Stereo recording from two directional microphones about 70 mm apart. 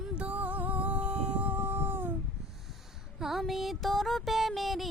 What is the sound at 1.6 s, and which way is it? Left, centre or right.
Dog, right.